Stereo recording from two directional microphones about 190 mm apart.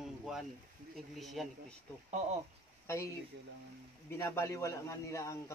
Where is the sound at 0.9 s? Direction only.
Centre (ahead or behind).